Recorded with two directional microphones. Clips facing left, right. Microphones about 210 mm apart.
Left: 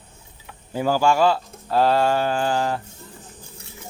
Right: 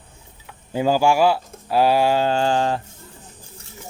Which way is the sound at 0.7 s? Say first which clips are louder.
Right 2 dB; 15° right (ahead or behind).